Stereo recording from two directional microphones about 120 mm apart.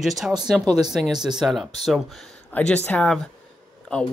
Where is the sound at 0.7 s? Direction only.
35° right (ahead or behind).